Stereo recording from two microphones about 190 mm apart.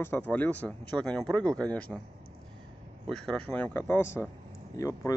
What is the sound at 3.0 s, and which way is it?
Speech, 5° left (ahead or behind).